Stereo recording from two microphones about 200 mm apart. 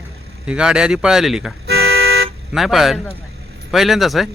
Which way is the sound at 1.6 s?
55° right (ahead or behind).